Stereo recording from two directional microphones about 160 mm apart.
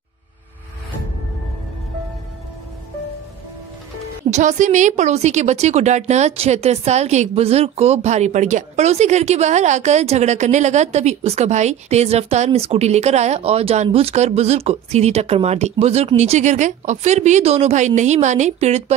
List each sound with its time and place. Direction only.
4.3 s a woman's voice: 50° right (ahead or behind)